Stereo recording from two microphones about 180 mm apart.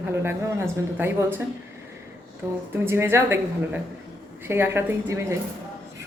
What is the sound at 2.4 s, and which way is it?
Speech, 15° right (ahead or behind).